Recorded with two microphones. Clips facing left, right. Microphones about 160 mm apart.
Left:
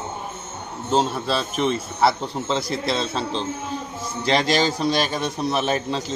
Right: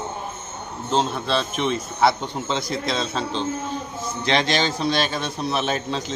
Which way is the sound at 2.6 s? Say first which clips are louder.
Left 1 dB; 35° left (ahead or behind).